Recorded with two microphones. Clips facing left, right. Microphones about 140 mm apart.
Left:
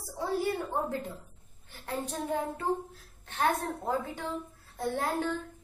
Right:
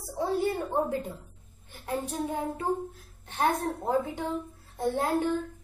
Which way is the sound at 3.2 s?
15° right (ahead or behind).